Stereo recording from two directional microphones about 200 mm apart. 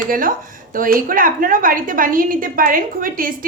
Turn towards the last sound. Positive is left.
turn(degrees=-45)  # may be behind; listen again after turning